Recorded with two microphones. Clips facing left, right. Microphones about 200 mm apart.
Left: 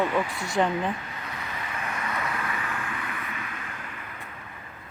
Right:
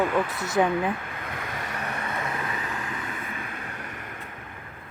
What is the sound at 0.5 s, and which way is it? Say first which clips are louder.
Speech: right 2 dB; 10° right (ahead or behind).